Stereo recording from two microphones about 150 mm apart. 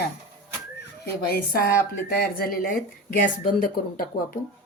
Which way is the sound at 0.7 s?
90° left.